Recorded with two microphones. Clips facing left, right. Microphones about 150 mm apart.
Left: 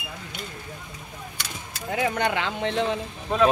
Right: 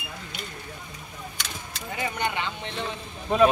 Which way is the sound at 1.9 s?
80° left.